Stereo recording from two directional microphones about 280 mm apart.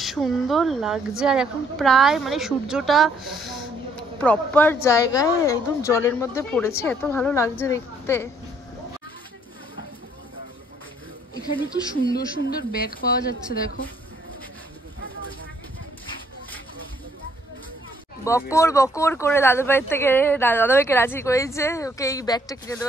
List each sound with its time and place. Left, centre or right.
0.0 s speech: centre
11.4 s a woman's voice: left
18.2 s speech: centre